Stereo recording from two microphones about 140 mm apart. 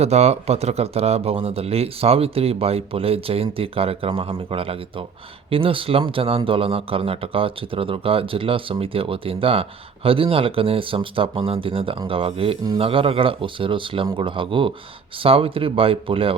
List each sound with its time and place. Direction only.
0.0 s speech: 50° right (ahead or behind)